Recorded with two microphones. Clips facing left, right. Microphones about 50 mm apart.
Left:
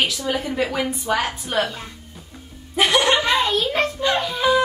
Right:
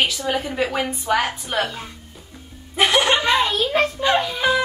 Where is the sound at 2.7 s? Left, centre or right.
Centre.